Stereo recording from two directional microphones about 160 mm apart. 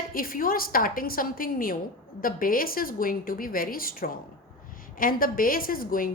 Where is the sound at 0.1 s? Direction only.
65° left (ahead or behind).